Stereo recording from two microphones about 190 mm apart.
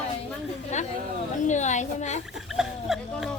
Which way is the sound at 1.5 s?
40° left (ahead or behind).